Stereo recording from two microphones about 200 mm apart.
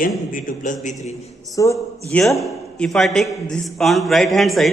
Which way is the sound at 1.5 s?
15° left (ahead or behind).